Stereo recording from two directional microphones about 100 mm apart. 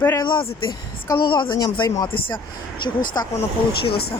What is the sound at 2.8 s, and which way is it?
Speech, 50° left (ahead or behind).